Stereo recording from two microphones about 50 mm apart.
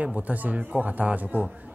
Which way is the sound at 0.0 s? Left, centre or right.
Right.